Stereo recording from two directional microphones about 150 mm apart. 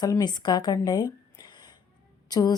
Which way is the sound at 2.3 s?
25° left (ahead or behind).